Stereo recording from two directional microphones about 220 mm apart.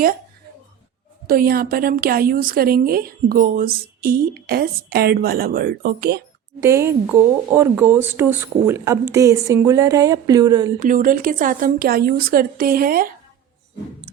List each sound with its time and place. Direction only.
1.3 s a woman's voice: 40° right (ahead or behind)
6.6 s speech: 10° right (ahead or behind)
10.8 s a woman's voice: 35° right (ahead or behind)